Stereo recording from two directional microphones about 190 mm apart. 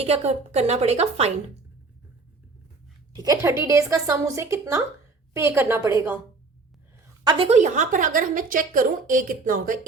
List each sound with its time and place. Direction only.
0.0 s a woman's voice: 35° right (ahead or behind)
3.2 s speech: 15° right (ahead or behind)
7.3 s a woman's voice: 30° right (ahead or behind)